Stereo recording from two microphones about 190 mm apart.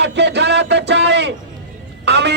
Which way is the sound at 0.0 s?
65° right (ahead or behind).